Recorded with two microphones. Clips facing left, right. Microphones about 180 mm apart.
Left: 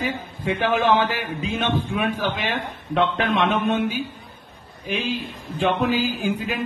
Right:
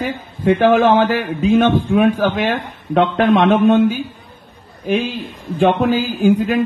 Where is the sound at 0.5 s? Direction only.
55° right (ahead or behind).